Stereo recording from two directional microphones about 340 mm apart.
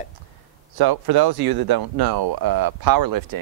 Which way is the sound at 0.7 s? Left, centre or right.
Right.